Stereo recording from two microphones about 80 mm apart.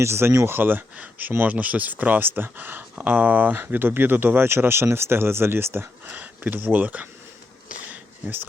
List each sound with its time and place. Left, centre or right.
0.0 s speech: right
7.9 s sniff: right